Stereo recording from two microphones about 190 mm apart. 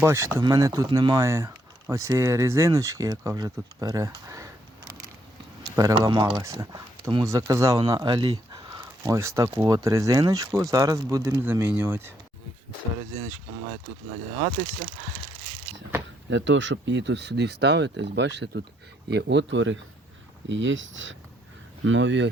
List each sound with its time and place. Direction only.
0.0 s speech: 15° right (ahead or behind)
5.6 s speech: 20° right (ahead or behind)
16.3 s speech: 75° right (ahead or behind)